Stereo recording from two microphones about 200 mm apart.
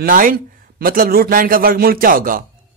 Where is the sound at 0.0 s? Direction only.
45° right (ahead or behind).